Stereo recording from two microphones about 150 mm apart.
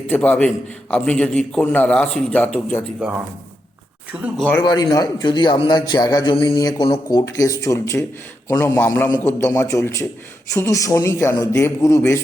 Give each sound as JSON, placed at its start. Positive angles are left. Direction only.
{"t": 0.1, "sound": "a man's voice", "side_deg": 5}
{"t": 4.1, "sound": "speech", "side_deg": -10}
{"t": 4.6, "sound": "a man's voice", "side_deg": 30}